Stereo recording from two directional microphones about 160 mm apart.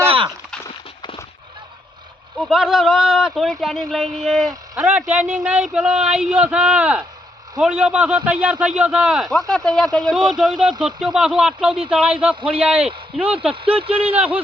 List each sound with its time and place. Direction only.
2.4 s a man's voice: centre (ahead or behind)
13.7 s speech: 35° right (ahead or behind)
14.0 s a man's voice: 10° right (ahead or behind)